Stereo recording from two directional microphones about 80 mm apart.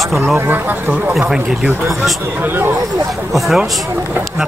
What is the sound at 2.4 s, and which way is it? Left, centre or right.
Speech, right.